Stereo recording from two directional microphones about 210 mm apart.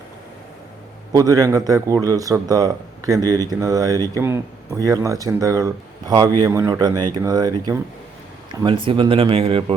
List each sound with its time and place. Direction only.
1.1 s speech: 15° right (ahead or behind)